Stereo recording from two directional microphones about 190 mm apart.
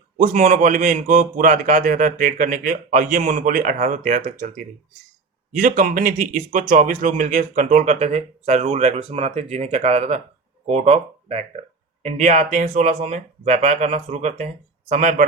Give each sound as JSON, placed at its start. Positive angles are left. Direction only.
{"t": 0.2, "sound": "a man's voice", "side_deg": -40}